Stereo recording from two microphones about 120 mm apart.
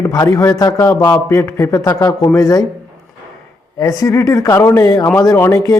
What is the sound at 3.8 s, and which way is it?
A man's voice, 25° left (ahead or behind).